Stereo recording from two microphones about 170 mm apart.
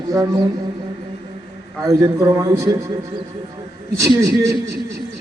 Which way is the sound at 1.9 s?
20° right (ahead or behind).